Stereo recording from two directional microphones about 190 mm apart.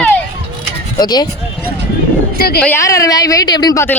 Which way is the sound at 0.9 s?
20° left (ahead or behind).